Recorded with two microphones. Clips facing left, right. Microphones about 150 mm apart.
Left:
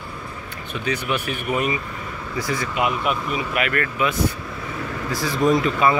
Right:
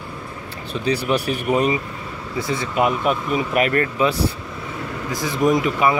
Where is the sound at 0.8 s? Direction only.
35° right (ahead or behind).